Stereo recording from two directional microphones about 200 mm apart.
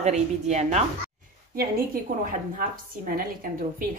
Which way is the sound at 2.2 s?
45° right (ahead or behind).